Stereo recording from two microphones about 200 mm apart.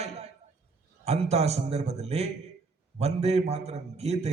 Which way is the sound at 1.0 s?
30° right (ahead or behind).